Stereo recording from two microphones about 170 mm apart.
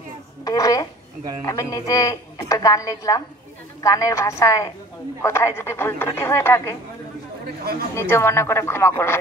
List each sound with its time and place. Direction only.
0.5 s a sound: 20° left (ahead or behind)
1.4 s a woman's voice: 20° left (ahead or behind)
7.9 s speech: 15° left (ahead or behind)